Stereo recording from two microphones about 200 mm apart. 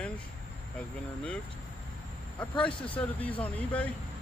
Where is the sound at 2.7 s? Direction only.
25° left (ahead or behind).